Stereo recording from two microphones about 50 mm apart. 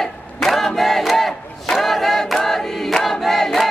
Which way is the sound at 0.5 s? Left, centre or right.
Centre.